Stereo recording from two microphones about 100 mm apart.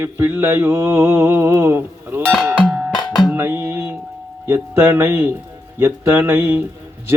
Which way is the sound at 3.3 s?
25° right (ahead or behind).